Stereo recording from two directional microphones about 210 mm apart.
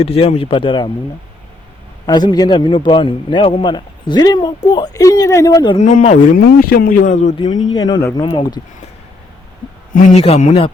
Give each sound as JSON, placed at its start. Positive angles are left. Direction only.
{"t": 0.0, "sound": "a man's voice", "side_deg": 30}
{"t": 2.0, "sound": "a man's voice", "side_deg": 20}
{"t": 5.8, "sound": "speech", "side_deg": 35}
{"t": 6.4, "sound": "speech", "side_deg": 50}
{"t": 7.5, "sound": "a man's voice", "side_deg": 20}
{"t": 9.9, "sound": "speech", "side_deg": 30}